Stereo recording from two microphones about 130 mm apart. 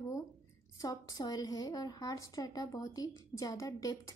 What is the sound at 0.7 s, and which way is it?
A woman's voice, 30° left (ahead or behind).